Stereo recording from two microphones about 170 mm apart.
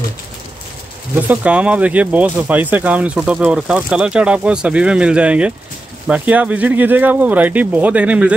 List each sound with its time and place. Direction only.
1.1 s speech: 10° right (ahead or behind)